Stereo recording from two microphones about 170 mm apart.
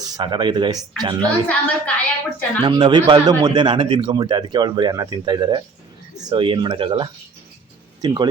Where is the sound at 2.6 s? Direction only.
30° right (ahead or behind).